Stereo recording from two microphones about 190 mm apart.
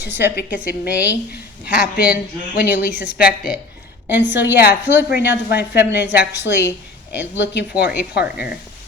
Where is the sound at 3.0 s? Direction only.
50° left (ahead or behind).